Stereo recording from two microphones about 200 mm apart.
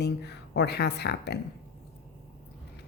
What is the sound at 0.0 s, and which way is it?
Speech, 55° left (ahead or behind).